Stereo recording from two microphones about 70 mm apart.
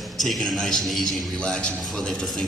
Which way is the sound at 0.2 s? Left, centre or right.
Centre.